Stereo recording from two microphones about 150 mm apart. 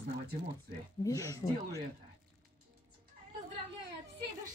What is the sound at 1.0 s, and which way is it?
Speech, 20° left (ahead or behind).